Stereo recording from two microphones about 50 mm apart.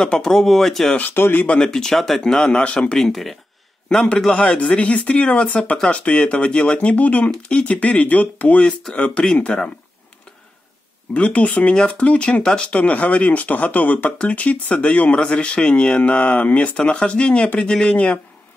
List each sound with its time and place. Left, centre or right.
0.2 s speech: centre
0.9 s speech: left
1.6 s speech: centre
3.0 s speech: centre
4.3 s speech: left
11.1 s speech: left
15.1 s speech: centre